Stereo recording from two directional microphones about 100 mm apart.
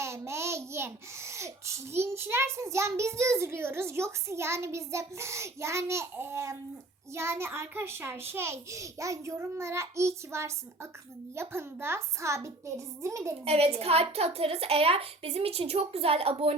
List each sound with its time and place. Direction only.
0.0 s a child's voice: 30° right (ahead or behind)
13.4 s a woman's voice: 90° right